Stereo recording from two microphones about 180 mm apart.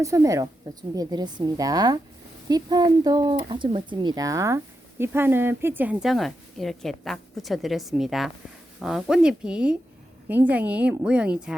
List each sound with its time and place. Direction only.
0.0 s a woman's voice: 15° right (ahead or behind)